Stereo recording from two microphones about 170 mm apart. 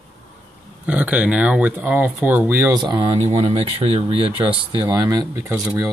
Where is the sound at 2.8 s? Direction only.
30° right (ahead or behind).